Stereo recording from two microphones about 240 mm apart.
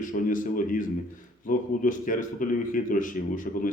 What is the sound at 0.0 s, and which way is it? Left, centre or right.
A man's voice, left.